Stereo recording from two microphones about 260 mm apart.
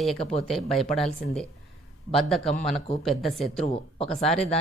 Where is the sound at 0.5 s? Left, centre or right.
Centre.